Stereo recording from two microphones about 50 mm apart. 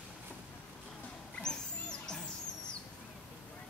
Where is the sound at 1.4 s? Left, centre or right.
Centre.